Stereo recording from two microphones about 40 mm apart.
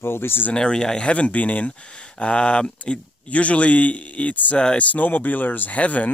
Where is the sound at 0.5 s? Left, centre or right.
Left.